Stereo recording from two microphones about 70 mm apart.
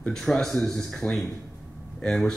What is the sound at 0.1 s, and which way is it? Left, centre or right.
Speech, centre.